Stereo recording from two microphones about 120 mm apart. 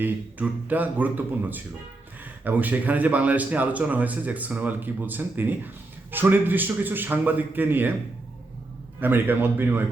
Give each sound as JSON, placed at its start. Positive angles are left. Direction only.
{"t": 0.0, "sound": "speech", "side_deg": -15}
{"t": 9.0, "sound": "speech", "side_deg": -15}